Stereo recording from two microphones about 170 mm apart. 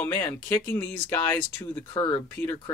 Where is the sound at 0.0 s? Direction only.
10° left (ahead or behind).